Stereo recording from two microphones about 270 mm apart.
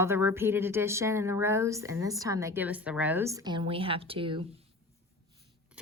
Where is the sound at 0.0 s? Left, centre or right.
Centre.